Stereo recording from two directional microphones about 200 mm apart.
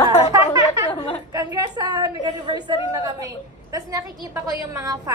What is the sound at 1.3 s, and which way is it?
A woman's voice, 15° right (ahead or behind).